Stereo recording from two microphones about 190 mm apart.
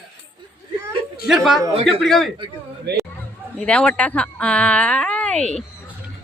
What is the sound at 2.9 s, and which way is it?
Speech, 55° right (ahead or behind).